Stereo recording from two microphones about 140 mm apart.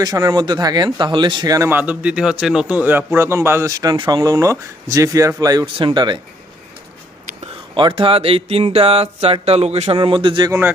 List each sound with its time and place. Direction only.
0.0 s speech: 30° right (ahead or behind)
7.8 s speech: 35° right (ahead or behind)
10.0 s speech: 35° right (ahead or behind)